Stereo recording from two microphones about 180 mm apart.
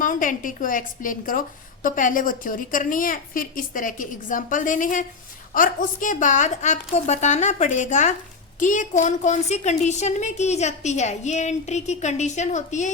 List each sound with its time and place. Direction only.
0.0 s a woman's voice: 45° left (ahead or behind)